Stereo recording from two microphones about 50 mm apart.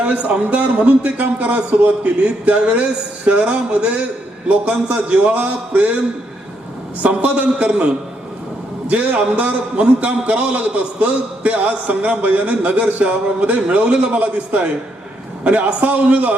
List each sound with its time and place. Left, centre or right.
0.0 s a man's voice: right
7.0 s a man's voice: right
8.9 s a man's voice: right